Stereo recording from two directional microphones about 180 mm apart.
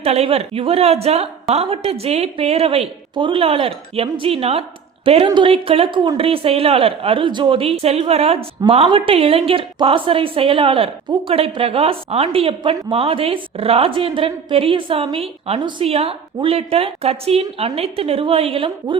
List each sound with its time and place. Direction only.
0.0 s speech: 35° right (ahead or behind)